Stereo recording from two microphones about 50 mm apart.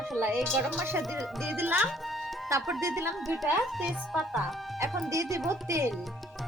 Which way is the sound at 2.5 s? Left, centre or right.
Right.